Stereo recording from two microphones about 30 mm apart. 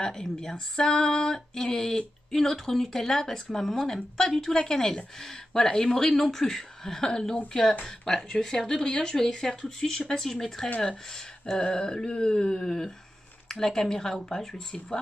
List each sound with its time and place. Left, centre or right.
0.1 s speech: centre
11.5 s speech: left